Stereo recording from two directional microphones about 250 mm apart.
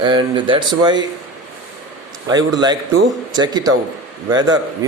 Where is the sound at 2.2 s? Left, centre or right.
Centre.